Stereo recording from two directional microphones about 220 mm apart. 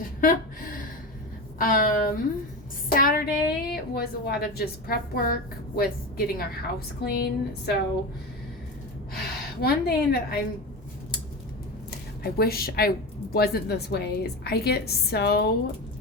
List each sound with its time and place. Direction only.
1.5 s a woman's voice: 40° left (ahead or behind)
9.1 s speech: 45° left (ahead or behind)
12.2 s a woman's voice: 45° left (ahead or behind)